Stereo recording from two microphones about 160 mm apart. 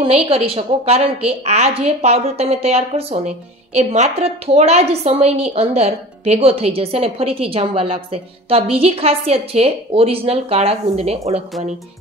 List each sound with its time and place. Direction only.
0.0 s a woman's voice: 35° right (ahead or behind)